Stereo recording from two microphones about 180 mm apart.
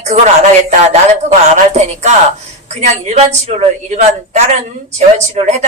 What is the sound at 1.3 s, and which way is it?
A woman's voice, 40° right (ahead or behind).